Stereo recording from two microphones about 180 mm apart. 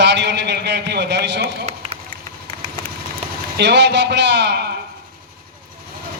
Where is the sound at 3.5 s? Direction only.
70° right (ahead or behind).